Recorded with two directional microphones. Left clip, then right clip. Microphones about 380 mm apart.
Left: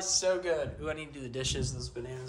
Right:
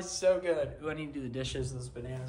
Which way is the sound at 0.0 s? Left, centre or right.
Centre.